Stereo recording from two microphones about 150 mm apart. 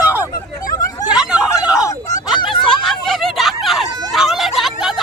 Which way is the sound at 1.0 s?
5° right (ahead or behind).